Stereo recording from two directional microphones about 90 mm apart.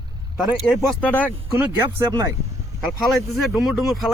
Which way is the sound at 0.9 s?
15° left (ahead or behind).